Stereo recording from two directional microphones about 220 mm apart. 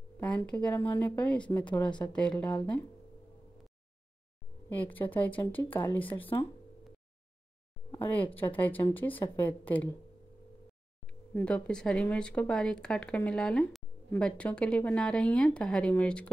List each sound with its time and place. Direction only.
0.2 s a woman's voice: 5° left (ahead or behind)
4.6 s a woman's voice: 10° left (ahead or behind)
7.9 s a woman's voice: 10° left (ahead or behind)
11.3 s speech: 5° left (ahead or behind)